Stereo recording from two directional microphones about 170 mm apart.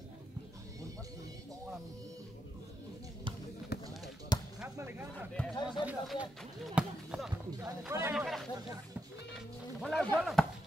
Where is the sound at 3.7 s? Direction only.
70° left (ahead or behind).